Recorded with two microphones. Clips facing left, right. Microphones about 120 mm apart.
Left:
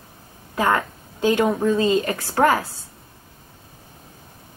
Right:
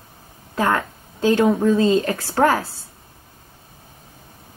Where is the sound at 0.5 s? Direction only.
15° left (ahead or behind).